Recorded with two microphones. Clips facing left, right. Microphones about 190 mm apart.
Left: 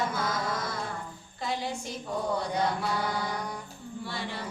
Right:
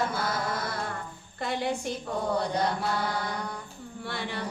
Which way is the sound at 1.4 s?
60° right (ahead or behind).